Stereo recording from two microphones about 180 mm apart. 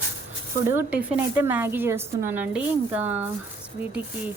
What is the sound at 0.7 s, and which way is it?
A woman's voice, 10° right (ahead or behind).